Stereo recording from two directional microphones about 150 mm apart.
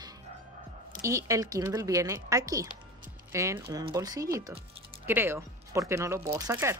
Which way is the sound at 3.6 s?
30° right (ahead or behind).